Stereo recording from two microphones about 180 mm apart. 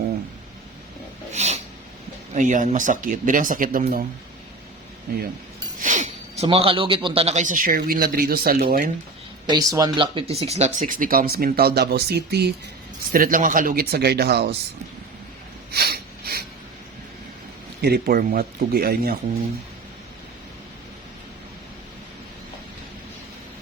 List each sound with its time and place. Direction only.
1.3 s a sound: 40° right (ahead or behind)
2.3 s speech: 45° right (ahead or behind)
5.8 s speech: 45° right (ahead or behind)
9.5 s speech: 20° right (ahead or behind); by 12.5 s 65° right (ahead or behind)
13.1 s speech: 50° right (ahead or behind); by 14.5 s 65° right (ahead or behind)
15.7 s a sound: 60° right (ahead or behind)
17.7 s speech: 60° right (ahead or behind)